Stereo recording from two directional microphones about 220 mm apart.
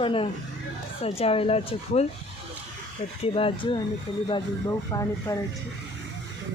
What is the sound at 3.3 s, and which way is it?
Speech, 25° left (ahead or behind).